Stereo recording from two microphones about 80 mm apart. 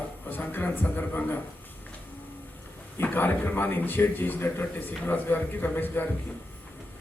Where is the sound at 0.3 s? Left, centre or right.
Left.